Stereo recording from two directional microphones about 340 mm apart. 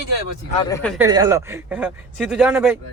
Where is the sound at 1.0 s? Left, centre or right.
Centre.